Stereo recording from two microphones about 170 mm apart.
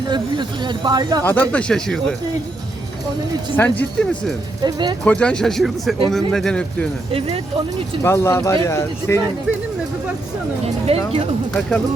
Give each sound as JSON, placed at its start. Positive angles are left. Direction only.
{"t": 0.1, "sound": "speech", "side_deg": -25}
{"t": 1.2, "sound": "speech", "side_deg": 10}
{"t": 3.5, "sound": "speech", "side_deg": 10}
{"t": 4.6, "sound": "speech", "side_deg": -25}
{"t": 5.0, "sound": "speech", "side_deg": 5}
{"t": 7.1, "sound": "speech", "side_deg": -35}
{"t": 8.0, "sound": "speech", "side_deg": 15}
{"t": 10.8, "sound": "speech", "side_deg": -35}